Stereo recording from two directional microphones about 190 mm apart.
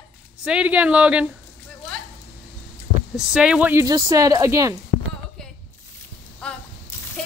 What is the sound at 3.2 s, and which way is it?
Speech, 5° right (ahead or behind).